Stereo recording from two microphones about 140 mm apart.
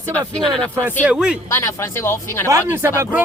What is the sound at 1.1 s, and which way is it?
Speech, 5° right (ahead or behind).